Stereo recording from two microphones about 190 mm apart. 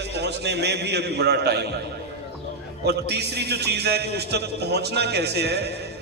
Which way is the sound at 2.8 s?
60° right (ahead or behind).